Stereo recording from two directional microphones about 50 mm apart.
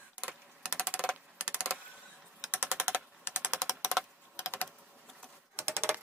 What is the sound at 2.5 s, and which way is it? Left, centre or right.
Typing, right.